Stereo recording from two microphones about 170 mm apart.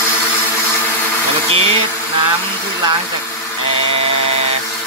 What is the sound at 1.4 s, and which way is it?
Speech, 35° right (ahead or behind).